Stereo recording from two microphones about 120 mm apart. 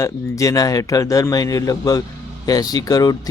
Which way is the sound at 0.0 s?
30° left (ahead or behind).